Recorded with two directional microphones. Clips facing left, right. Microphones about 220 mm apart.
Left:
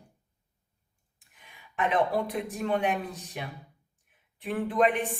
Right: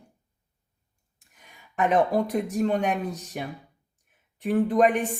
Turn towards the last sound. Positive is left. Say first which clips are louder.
# right 5 dB
turn(degrees=-45)  # may be behind; listen again after turning